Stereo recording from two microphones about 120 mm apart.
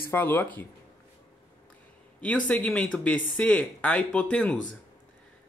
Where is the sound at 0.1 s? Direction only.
20° left (ahead or behind).